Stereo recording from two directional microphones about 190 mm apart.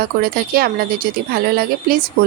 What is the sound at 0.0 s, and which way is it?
Speech, 50° right (ahead or behind).